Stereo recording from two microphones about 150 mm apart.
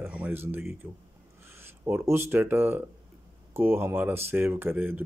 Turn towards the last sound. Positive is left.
turn(degrees=-15)  # may be behind; listen again after turning